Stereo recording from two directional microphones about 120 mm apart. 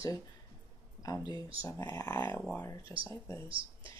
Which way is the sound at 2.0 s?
15° left (ahead or behind).